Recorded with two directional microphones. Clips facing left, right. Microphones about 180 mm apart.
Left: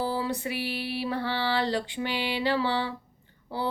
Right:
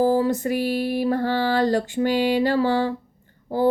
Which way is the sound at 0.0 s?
45° right (ahead or behind).